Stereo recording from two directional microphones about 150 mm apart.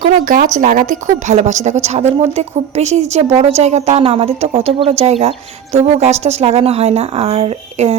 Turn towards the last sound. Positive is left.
turn(degrees=-45)  # may be behind; listen again after turning